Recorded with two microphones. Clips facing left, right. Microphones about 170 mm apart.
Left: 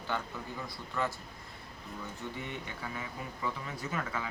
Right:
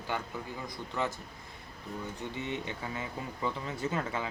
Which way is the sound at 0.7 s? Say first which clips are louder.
Right 1 dB; 20° right (ahead or behind).